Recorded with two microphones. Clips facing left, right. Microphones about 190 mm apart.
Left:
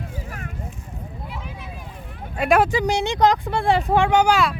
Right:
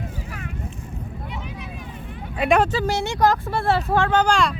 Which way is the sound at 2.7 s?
15° left (ahead or behind).